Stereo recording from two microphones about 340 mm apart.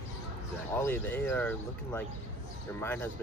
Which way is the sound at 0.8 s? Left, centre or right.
Centre.